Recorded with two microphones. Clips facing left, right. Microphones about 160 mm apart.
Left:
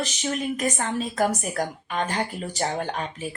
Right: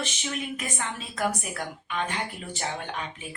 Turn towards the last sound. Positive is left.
turn(degrees=40)  # may be behind; listen again after turning